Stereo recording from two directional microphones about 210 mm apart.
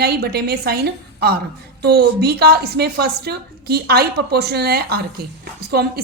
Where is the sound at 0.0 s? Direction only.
50° right (ahead or behind).